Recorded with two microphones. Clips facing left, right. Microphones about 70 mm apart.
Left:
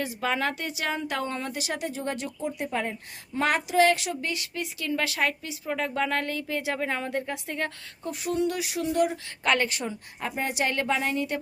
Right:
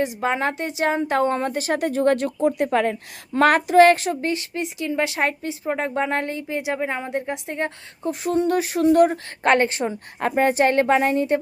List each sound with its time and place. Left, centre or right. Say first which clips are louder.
0.2 s a woman's voice: right 5 dB; right
10.2 s a woman's voice: right 11 dB; right